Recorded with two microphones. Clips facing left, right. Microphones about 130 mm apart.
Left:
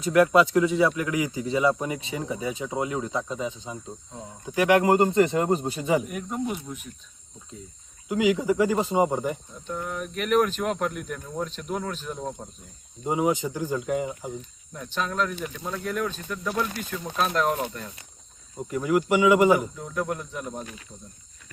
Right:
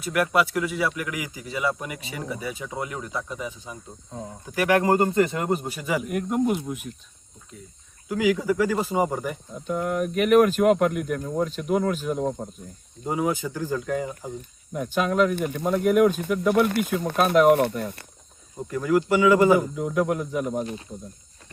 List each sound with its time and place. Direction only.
0.0 s speech: 25° left (ahead or behind)
6.1 s speech: 5° right (ahead or behind)
6.4 s speech: 55° right (ahead or behind)
6.7 s speech: 5° right (ahead or behind)
8.0 s speech: 20° left (ahead or behind)
9.6 s speech: 5° right (ahead or behind)
13.1 s speech: 20° left (ahead or behind)
14.9 s speech: 5° right (ahead or behind)
15.4 s speech: 55° right (ahead or behind)
15.7 s speech: 15° right (ahead or behind)
16.5 s speech: 60° right (ahead or behind)
18.5 s speech: 20° left (ahead or behind)
19.7 s speech: 10° right (ahead or behind)